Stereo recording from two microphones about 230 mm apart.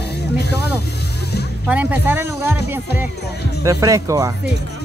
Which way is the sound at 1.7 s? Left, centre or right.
Centre.